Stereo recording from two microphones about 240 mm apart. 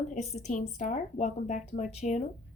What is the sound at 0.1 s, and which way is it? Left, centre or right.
Speech, left.